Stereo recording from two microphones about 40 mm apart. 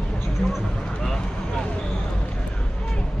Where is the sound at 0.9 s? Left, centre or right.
Centre.